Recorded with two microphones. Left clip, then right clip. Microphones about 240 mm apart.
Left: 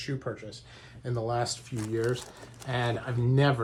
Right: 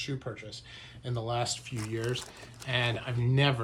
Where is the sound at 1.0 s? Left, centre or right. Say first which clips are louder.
Left 3 dB; right.